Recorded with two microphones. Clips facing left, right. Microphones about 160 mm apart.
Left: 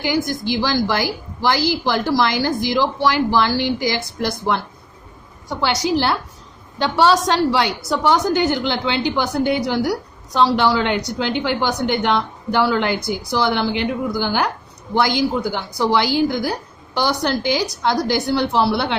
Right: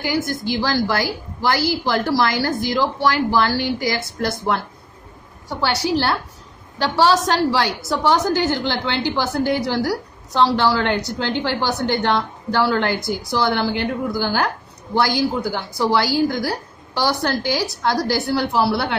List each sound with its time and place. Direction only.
0.0 s a woman's voice: 15° left (ahead or behind)